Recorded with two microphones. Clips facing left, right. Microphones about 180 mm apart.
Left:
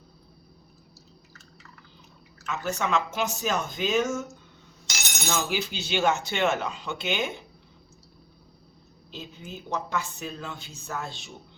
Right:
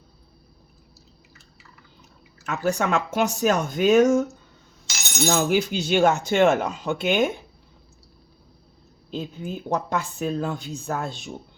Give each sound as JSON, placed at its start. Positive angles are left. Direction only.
{"t": 2.5, "sound": "speech", "side_deg": -55}
{"t": 5.3, "sound": "speech", "side_deg": -50}
{"t": 9.0, "sound": "speech", "side_deg": -50}